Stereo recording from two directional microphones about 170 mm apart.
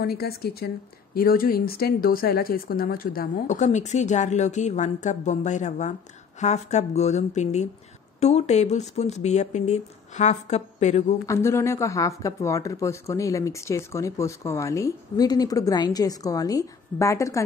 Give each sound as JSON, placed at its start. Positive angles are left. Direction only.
{"t": 0.0, "sound": "a woman's voice", "side_deg": 65}
{"t": 11.2, "sound": "speech", "side_deg": 15}